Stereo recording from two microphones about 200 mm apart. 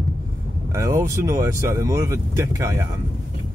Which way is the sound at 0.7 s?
15° right (ahead or behind).